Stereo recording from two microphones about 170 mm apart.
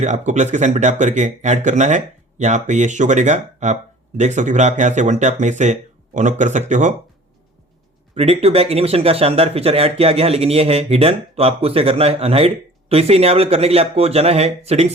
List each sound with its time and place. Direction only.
0.0 s speech: 45° right (ahead or behind)
8.1 s speech: 35° right (ahead or behind)